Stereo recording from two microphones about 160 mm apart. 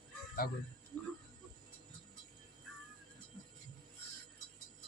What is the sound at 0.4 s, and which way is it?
Speech, 70° left (ahead or behind).